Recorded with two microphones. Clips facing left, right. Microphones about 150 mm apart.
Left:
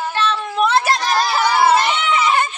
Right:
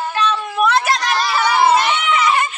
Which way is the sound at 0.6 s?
5° right (ahead or behind).